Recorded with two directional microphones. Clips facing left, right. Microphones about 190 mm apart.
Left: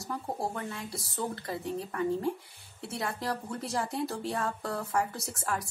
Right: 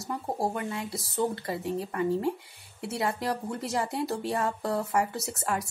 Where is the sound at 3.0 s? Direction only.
25° right (ahead or behind).